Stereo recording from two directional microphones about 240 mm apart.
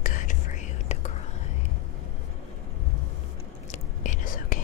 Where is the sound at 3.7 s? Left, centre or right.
Left.